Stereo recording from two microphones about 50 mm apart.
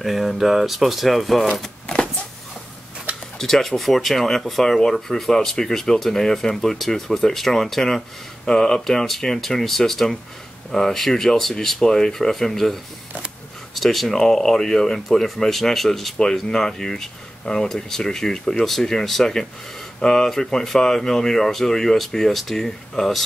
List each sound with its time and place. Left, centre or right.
0.0 s speech: centre
1.9 s power windows: centre
3.3 s speech: centre